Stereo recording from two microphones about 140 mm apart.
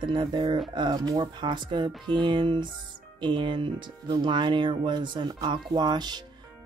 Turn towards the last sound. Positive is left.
turn(degrees=-30)  # may be behind; listen again after turning